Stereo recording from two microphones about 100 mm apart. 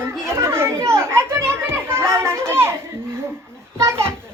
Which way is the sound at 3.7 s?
25° right (ahead or behind).